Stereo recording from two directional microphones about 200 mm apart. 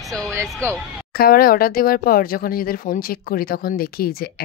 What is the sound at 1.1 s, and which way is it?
Speech, 45° left (ahead or behind).